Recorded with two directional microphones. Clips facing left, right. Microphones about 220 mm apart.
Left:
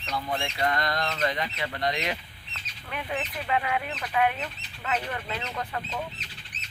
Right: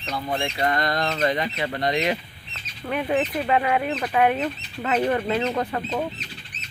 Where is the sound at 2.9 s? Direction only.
45° right (ahead or behind).